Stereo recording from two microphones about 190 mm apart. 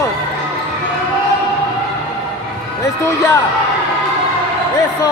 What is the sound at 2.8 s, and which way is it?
Speech, 15° left (ahead or behind).